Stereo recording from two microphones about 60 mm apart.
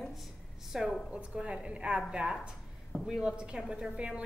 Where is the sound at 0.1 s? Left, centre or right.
Centre.